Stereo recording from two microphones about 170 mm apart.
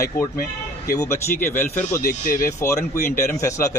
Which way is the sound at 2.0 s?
60° left (ahead or behind).